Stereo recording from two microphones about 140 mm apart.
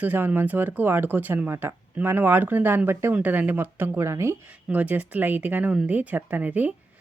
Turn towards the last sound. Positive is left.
turn(degrees=-10)  # may be behind; listen again after turning